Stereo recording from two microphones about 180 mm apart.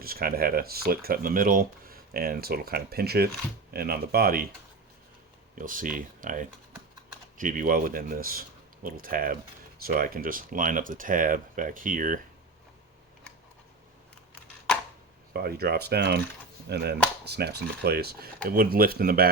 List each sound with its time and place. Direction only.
0.0 s speech: 55° right (ahead or behind)
5.5 s speech: 50° right (ahead or behind)
15.3 s speech: 60° right (ahead or behind)